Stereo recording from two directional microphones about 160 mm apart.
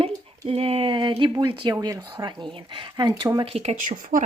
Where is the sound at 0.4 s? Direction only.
40° right (ahead or behind).